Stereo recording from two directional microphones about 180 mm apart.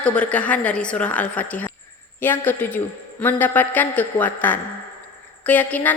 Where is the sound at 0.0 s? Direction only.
5° left (ahead or behind).